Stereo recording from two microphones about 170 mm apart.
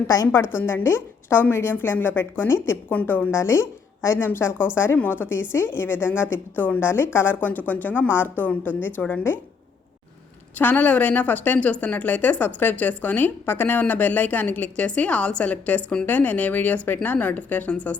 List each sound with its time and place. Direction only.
0.1 s a woman's voice: 15° left (ahead or behind)
10.5 s a woman's voice: 10° left (ahead or behind)